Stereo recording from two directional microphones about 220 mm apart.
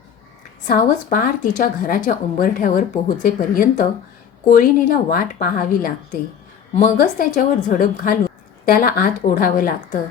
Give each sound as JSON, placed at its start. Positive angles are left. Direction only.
{"t": 0.7, "sound": "speech", "side_deg": 40}